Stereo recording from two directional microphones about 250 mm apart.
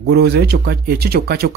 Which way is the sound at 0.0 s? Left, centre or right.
Right.